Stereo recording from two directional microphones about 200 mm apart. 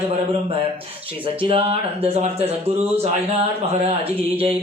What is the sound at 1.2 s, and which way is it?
Speech, 30° right (ahead or behind).